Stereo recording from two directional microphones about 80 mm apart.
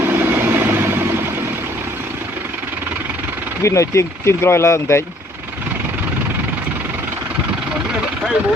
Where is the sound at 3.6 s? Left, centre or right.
Left.